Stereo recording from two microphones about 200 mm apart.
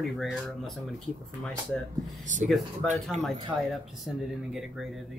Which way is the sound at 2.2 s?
40° right (ahead or behind).